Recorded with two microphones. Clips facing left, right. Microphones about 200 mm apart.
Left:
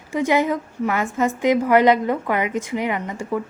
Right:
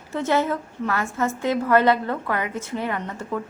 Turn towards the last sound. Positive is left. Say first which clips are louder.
# left 4 dB
turn(degrees=10)  # may be behind; listen again after turning